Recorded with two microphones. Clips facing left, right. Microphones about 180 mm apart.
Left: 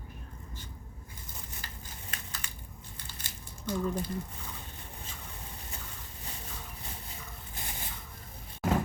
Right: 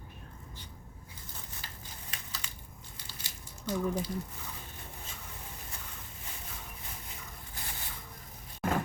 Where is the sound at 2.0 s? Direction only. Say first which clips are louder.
Left 2 dB; 50° left (ahead or behind).